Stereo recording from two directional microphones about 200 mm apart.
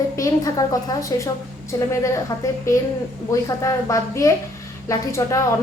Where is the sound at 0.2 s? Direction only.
15° left (ahead or behind).